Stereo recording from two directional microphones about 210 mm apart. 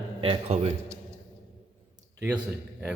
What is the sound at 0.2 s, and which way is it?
Speech, 30° right (ahead or behind).